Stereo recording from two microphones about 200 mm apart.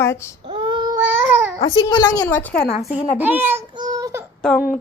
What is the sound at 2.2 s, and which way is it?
Speech, 10° left (ahead or behind).